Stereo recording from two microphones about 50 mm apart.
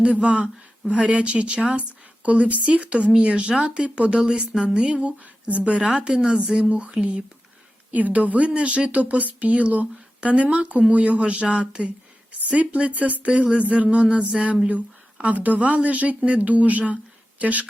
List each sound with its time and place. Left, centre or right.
0.0 s speech: right